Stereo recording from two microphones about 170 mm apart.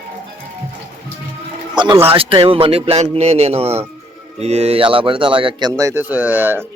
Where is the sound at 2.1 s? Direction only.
35° right (ahead or behind).